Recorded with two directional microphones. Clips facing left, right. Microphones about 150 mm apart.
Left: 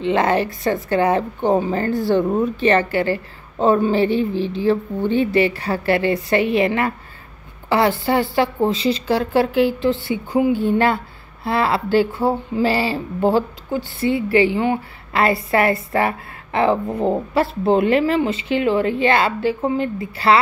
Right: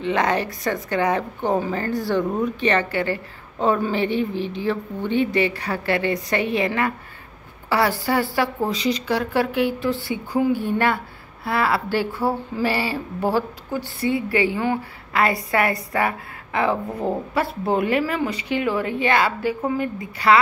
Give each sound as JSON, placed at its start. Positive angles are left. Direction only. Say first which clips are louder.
{"t": 0.0, "sound": "a woman's voice", "louder": "left 4 dB", "side_deg": 30}